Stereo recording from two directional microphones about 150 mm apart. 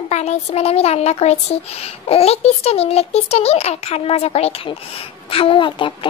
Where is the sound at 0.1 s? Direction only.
45° left (ahead or behind).